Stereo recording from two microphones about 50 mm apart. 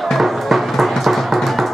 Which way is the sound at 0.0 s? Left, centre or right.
Centre.